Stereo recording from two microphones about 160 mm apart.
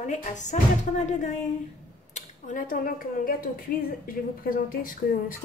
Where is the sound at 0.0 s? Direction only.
50° left (ahead or behind).